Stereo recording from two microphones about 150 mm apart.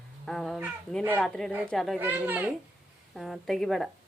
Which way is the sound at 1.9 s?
10° right (ahead or behind).